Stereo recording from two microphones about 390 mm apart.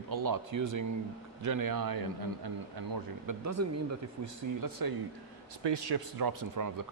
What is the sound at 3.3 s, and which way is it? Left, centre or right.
Speech, right.